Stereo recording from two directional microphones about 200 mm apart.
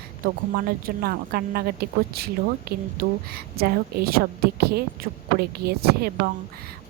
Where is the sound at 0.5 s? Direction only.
50° right (ahead or behind).